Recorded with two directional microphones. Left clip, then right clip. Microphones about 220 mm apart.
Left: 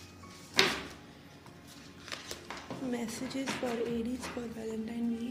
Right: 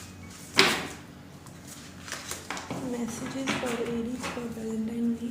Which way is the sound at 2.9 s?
50° left (ahead or behind).